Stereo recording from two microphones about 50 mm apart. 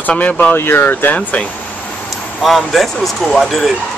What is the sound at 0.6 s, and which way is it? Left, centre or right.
Speech, left.